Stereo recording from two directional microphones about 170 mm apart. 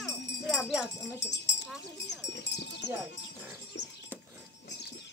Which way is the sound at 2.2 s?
85° left.